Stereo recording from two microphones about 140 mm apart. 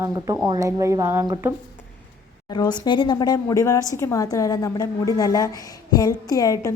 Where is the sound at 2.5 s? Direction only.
30° left (ahead or behind).